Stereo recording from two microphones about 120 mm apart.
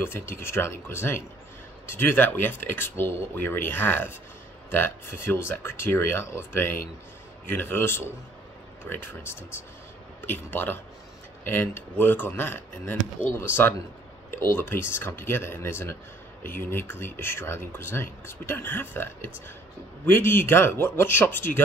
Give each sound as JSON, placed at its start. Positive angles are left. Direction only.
{"t": 0.0, "sound": "speech", "side_deg": 20}